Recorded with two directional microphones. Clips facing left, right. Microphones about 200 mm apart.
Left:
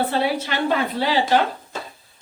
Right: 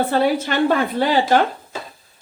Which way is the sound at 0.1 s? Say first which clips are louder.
Right 4 dB; 45° right (ahead or behind).